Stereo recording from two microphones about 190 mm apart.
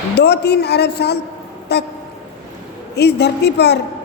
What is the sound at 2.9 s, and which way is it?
Speech, 60° left (ahead or behind).